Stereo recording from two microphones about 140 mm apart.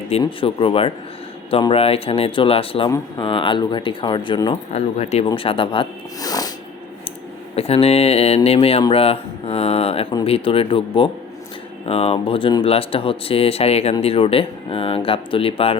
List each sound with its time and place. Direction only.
0.2 s speech: 40° left (ahead or behind)
4.7 s speech: 50° left (ahead or behind)
6.1 s snort: 25° left (ahead or behind)
7.5 s speech: 45° left (ahead or behind)